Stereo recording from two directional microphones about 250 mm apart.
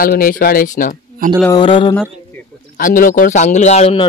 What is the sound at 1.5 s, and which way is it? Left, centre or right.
Speech, centre.